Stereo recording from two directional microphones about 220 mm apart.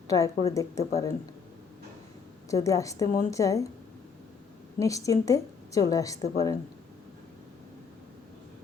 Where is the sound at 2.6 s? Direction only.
15° left (ahead or behind).